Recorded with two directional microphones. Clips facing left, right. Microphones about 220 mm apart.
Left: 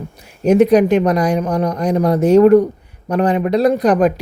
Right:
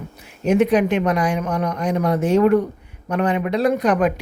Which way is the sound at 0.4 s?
40° left (ahead or behind).